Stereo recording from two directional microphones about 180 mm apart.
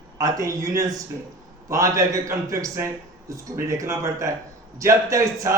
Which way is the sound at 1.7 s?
20° right (ahead or behind).